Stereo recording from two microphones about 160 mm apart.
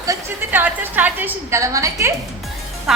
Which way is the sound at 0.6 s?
10° right (ahead or behind).